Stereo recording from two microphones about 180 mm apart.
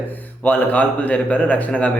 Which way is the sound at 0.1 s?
10° left (ahead or behind).